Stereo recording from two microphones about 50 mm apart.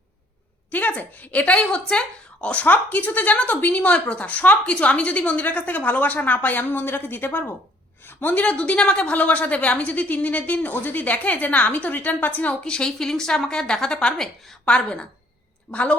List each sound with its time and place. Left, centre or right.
0.7 s a woman's voice: left
8.0 s a sound: left
8.4 s a woman's voice: left
12.6 s a woman's voice: centre